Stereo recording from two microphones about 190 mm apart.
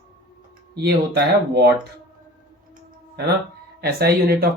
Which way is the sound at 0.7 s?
60° right (ahead or behind).